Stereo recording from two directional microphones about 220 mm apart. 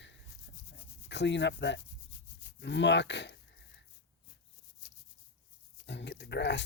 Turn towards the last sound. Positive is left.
turn(degrees=50)  # may be behind; listen again after turning